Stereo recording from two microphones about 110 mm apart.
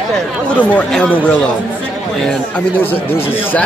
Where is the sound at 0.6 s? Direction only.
15° left (ahead or behind).